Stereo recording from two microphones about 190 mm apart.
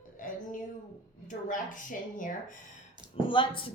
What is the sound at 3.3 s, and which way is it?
Speech, 25° left (ahead or behind).